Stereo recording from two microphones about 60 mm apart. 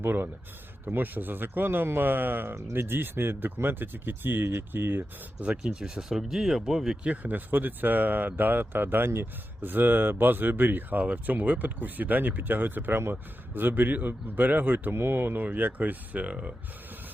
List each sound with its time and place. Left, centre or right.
0.0 s speech: right
5.4 s speech: centre
7.2 s speech: right